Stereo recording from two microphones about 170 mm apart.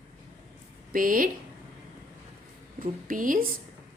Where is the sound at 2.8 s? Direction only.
55° right (ahead or behind).